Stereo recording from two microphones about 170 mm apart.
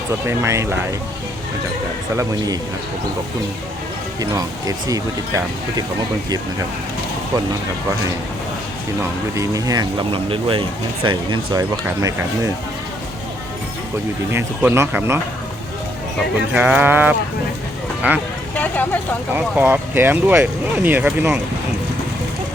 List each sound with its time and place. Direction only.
0.3 s speech: 15° right (ahead or behind)
4.2 s speech: 20° right (ahead or behind)
9.0 s speech: 20° right (ahead or behind)
14.3 s speech: 15° right (ahead or behind)
16.5 s speech: 10° right (ahead or behind)
18.5 s speech: 10° left (ahead or behind)
19.3 s speech: 10° right (ahead or behind)